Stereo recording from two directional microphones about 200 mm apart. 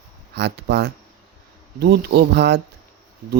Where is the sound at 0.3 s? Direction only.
60° right (ahead or behind).